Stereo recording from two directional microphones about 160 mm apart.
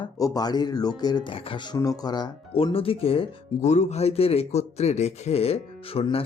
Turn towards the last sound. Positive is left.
turn(degrees=35)  # may be behind; listen again after turning